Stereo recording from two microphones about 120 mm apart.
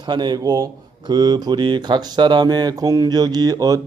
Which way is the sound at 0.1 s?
40° right (ahead or behind).